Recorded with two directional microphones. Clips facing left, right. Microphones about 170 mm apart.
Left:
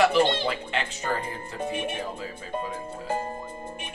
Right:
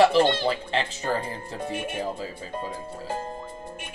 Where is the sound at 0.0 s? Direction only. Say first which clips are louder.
Right 2 dB; 35° right (ahead or behind).